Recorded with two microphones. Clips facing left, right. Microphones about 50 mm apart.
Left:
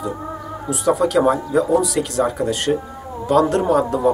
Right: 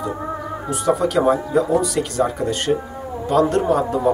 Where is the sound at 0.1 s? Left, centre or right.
Centre.